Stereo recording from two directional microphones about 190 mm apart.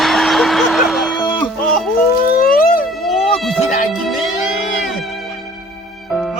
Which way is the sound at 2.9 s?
Centre (ahead or behind).